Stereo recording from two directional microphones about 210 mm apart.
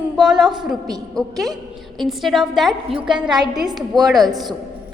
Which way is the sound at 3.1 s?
20° right (ahead or behind).